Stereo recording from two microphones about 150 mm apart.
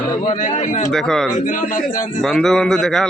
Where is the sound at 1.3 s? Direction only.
60° left (ahead or behind).